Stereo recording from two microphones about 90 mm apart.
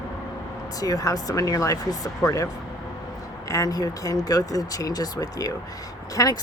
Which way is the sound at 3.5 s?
40° left (ahead or behind).